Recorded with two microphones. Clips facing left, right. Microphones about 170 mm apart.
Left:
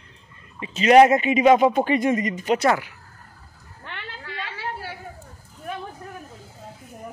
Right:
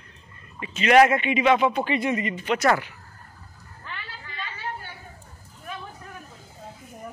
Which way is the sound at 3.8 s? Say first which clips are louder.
Left 3 dB; 70° left (ahead or behind).